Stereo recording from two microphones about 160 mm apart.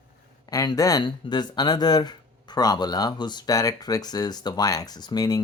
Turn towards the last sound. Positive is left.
turn(degrees=25)  # may be behind; listen again after turning